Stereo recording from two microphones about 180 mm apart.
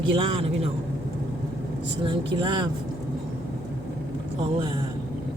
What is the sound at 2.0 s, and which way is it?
Speech, 25° right (ahead or behind).